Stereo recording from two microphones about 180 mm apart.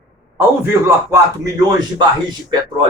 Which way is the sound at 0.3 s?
15° right (ahead or behind).